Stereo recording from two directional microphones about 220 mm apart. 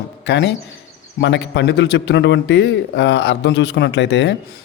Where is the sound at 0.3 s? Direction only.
55° left (ahead or behind).